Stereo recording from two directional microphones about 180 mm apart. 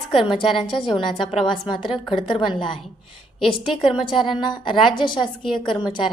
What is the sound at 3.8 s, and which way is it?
Speech, centre (ahead or behind).